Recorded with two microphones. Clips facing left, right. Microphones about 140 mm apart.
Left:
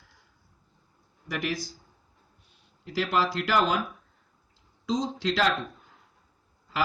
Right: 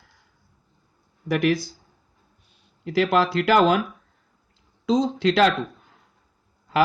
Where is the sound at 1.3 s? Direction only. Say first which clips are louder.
Right 10 dB; 60° right (ahead or behind).